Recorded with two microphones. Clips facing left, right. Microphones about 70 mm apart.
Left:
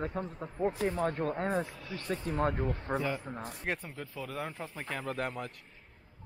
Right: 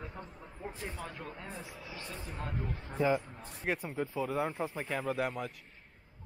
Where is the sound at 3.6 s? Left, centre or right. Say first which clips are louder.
Right 4 dB; centre.